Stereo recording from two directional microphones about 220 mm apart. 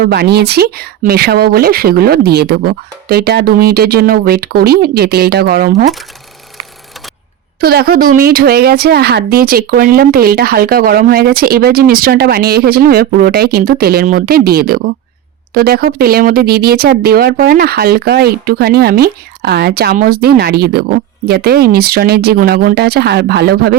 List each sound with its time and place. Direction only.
0.0 s a woman's voice: 45° right (ahead or behind)
7.6 s a woman's voice: 45° right (ahead or behind)